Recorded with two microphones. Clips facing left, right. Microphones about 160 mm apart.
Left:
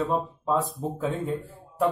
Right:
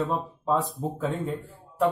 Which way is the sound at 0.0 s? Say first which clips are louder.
Left 1 dB; centre (ahead or behind).